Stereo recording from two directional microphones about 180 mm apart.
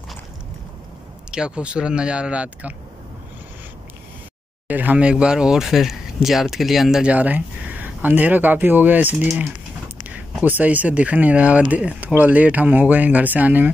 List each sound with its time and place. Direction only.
1.3 s speech: 5° right (ahead or behind)
4.6 s speech: 10° right (ahead or behind)
10.0 s a sound: 10° right (ahead or behind)
10.6 s speech: 10° right (ahead or behind)